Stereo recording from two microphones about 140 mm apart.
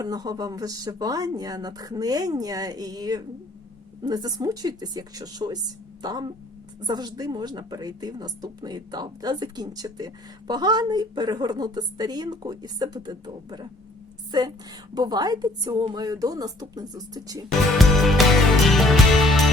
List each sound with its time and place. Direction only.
0.0 s a woman's voice: 25° right (ahead or behind)
17.7 s music: centre (ahead or behind)